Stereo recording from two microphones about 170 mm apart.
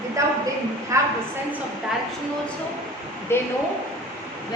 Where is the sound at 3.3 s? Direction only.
15° left (ahead or behind).